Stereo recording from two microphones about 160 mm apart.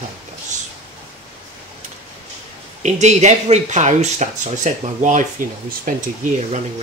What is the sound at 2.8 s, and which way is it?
Speech, 45° right (ahead or behind).